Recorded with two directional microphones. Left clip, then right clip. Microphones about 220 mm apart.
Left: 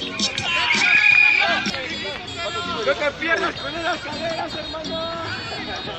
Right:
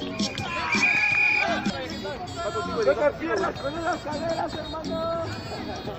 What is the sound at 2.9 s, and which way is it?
Speech, 35° right (ahead or behind).